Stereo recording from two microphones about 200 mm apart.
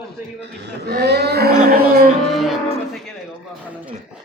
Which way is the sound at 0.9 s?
55° right (ahead or behind).